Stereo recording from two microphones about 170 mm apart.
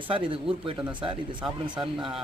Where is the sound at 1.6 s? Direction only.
30° right (ahead or behind).